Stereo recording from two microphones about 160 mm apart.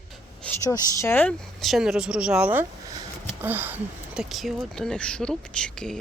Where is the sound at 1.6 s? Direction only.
Centre (ahead or behind).